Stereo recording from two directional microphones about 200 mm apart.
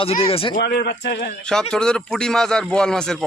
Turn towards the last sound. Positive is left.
turn(degrees=5)  # may be behind; listen again after turning